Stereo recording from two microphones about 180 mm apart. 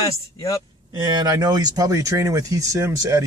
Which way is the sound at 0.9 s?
25° right (ahead or behind).